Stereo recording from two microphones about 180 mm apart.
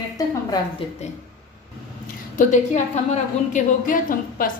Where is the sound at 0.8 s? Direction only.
30° left (ahead or behind).